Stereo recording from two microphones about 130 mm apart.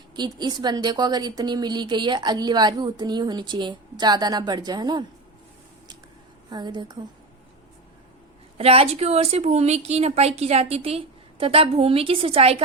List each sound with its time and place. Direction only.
0.2 s a woman's voice: 35° right (ahead or behind)
6.5 s a woman's voice: 35° right (ahead or behind)
8.5 s a woman's voice: 50° right (ahead or behind)